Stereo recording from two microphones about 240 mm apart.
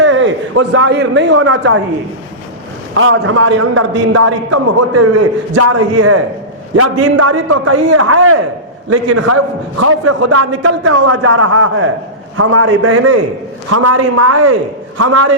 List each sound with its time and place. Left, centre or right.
0.0 s a man's voice: right
2.9 s a man's voice: right
8.9 s a man's voice: right
13.7 s a man's voice: right